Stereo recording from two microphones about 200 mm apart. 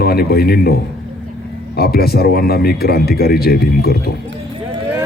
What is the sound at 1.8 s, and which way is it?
Speech, 50° left (ahead or behind).